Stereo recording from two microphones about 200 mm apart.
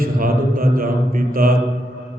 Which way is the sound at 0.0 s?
45° right (ahead or behind).